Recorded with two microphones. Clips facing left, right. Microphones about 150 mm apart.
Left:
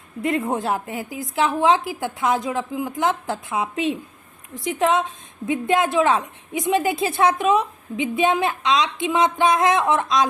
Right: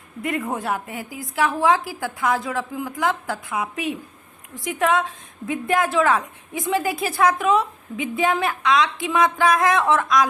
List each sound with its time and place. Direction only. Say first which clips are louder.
0.2 s a woman's voice: left 3 dB; 25° left (ahead or behind)